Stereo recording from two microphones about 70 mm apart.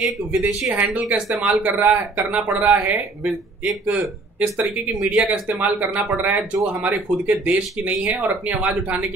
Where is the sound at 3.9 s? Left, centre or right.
Right.